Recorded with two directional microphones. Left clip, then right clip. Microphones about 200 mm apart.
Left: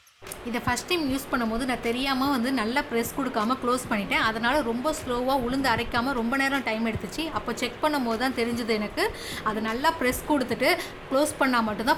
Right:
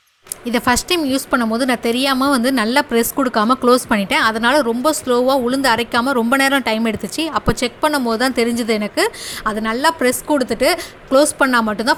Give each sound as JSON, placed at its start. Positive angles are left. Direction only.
{"t": 0.4, "sound": "a woman's voice", "side_deg": -35}